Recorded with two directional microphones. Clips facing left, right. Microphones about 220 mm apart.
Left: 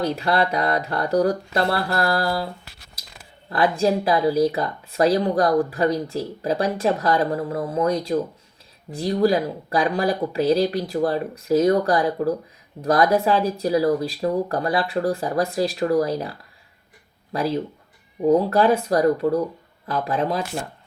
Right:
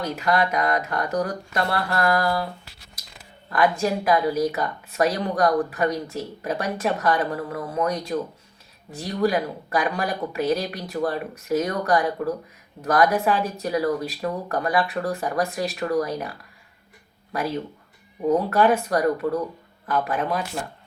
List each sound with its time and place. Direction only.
0.2 s speech: 30° left (ahead or behind)
3.5 s speech: 30° left (ahead or behind)
18.3 s speech: 30° left (ahead or behind)